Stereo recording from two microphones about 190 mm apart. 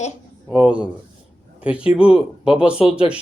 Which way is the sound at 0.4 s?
5° right (ahead or behind).